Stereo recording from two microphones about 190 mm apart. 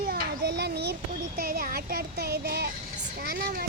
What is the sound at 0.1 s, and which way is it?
Children playing, 60° right (ahead or behind).